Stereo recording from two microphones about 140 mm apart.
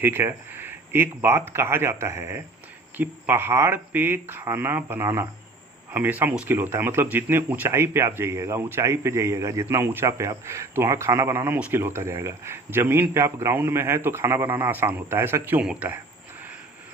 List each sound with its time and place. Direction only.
0.0 s speech: 15° right (ahead or behind)